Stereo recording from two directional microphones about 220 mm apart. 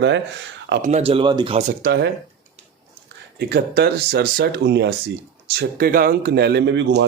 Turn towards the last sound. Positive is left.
turn(degrees=-55)  # may be behind; listen again after turning